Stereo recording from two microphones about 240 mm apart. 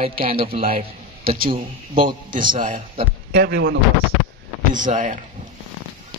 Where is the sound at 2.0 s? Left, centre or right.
Right.